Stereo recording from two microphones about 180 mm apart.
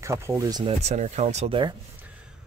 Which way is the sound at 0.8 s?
40° right (ahead or behind).